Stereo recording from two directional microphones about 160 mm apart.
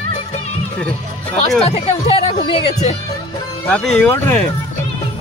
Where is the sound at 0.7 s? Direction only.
10° left (ahead or behind).